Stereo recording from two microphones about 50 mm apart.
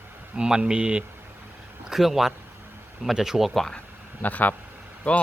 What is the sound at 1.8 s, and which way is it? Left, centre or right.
Speech, centre.